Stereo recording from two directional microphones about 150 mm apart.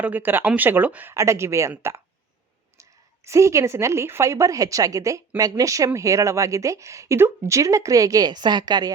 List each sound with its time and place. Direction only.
0.0 s speech: 10° right (ahead or behind)
3.2 s a woman's voice: 20° right (ahead or behind)